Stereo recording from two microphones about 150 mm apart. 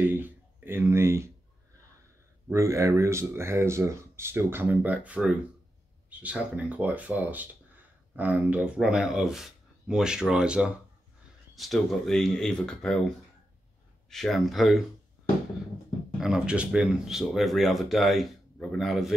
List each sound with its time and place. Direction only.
0.0 s speech: 15° right (ahead or behind)
2.5 s speech: 20° right (ahead or behind); by 13.0 s 5° left (ahead or behind)
14.1 s speech: centre (ahead or behind)
16.2 s speech: 5° right (ahead or behind)